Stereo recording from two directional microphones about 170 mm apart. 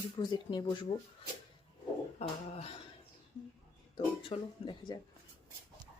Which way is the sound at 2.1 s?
35° left (ahead or behind).